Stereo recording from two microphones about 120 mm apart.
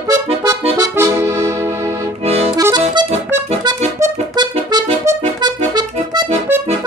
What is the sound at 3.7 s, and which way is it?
Music, 35° right (ahead or behind).